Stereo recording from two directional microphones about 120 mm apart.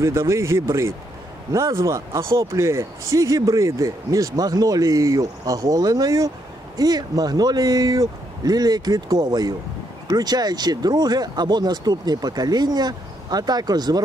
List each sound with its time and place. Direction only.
0.0 s speech: 25° right (ahead or behind)